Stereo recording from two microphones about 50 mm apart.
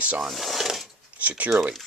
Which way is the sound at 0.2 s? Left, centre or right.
Centre.